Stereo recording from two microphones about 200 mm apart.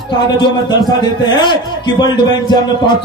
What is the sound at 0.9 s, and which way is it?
Speech, 20° left (ahead or behind).